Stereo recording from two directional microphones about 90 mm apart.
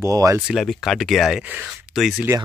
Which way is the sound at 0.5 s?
Centre (ahead or behind).